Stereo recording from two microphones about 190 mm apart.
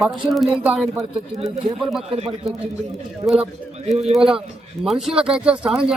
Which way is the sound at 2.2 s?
35° right (ahead or behind).